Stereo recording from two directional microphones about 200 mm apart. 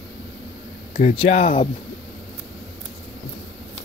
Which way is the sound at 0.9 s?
30° left (ahead or behind).